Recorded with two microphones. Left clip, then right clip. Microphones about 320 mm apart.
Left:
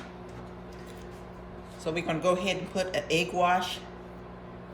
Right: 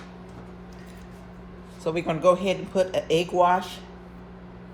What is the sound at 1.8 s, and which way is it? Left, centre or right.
Speech, centre.